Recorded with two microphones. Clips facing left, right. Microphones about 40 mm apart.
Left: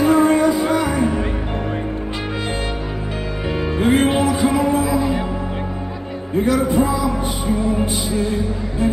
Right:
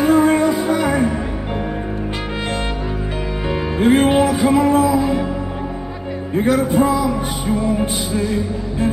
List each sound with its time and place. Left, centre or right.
0.0 s music: centre
3.4 s music: centre
6.3 s music: centre